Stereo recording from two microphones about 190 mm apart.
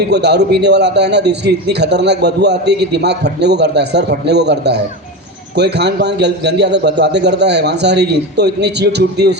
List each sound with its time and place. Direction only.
0.1 s a man's voice: 60° right (ahead or behind)